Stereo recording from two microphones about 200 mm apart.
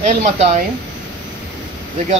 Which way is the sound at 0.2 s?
35° right (ahead or behind).